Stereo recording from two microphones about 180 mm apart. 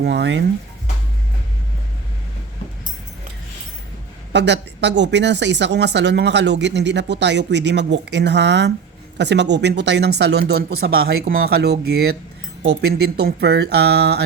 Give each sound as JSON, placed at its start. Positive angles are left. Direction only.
{"t": 0.0, "sound": "speech", "side_deg": -75}
{"t": 4.3, "sound": "speech", "side_deg": -75}